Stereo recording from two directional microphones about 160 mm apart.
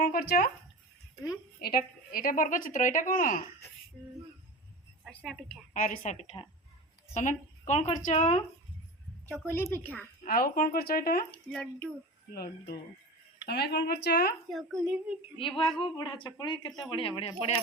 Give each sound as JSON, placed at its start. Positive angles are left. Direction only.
{"t": 0.0, "sound": "speech", "side_deg": 70}
{"t": 1.6, "sound": "a woman's voice", "side_deg": 70}
{"t": 5.0, "sound": "a woman's voice", "side_deg": 0}
{"t": 5.7, "sound": "a woman's voice", "side_deg": 55}
{"t": 7.1, "sound": "a woman's voice", "side_deg": 50}
{"t": 9.5, "sound": "a woman's voice", "side_deg": 15}
{"t": 10.2, "sound": "a woman's voice", "side_deg": 65}
{"t": 11.3, "sound": "a woman's voice", "side_deg": 5}
{"t": 13.5, "sound": "speech", "side_deg": 90}
{"t": 14.5, "sound": "a woman's voice", "side_deg": 0}
{"t": 15.4, "sound": "speech", "side_deg": 35}